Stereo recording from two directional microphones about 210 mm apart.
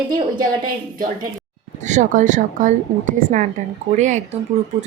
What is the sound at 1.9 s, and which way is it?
Speech, 35° right (ahead or behind).